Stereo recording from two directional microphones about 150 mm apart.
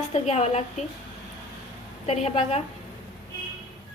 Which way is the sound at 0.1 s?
45° left (ahead or behind).